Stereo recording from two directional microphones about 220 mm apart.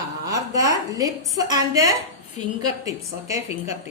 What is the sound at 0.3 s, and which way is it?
A woman's voice, 15° right (ahead or behind).